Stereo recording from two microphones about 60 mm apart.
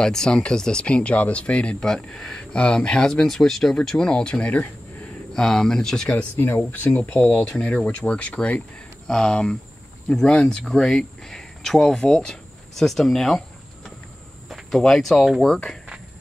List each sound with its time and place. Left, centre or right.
0.0 s speech: centre
5.3 s speech: centre
6.3 s speech: left
9.0 s speech: centre
14.5 s speech: centre